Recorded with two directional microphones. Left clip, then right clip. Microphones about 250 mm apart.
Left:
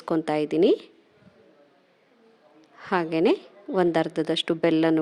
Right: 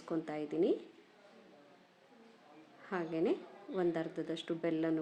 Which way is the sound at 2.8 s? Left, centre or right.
Left.